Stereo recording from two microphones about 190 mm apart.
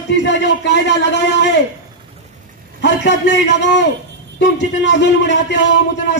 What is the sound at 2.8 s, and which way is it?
A man's voice, 65° left (ahead or behind).